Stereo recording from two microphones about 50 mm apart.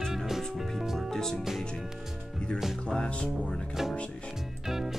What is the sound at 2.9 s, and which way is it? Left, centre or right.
Music, centre.